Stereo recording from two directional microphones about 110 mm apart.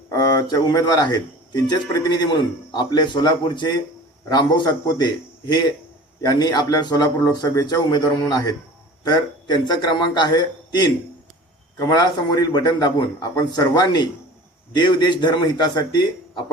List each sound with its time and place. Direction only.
0.1 s a man's voice: 35° left (ahead or behind)